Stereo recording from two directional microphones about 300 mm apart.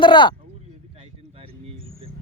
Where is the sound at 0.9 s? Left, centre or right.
Centre.